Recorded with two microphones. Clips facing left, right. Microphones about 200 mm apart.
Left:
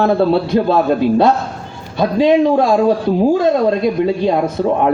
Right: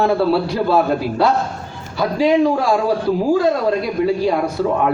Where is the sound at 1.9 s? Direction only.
20° left (ahead or behind).